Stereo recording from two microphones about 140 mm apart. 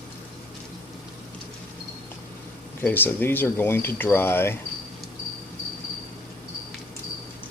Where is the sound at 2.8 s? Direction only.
15° left (ahead or behind).